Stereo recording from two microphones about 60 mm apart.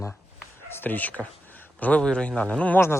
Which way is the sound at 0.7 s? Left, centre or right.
Left.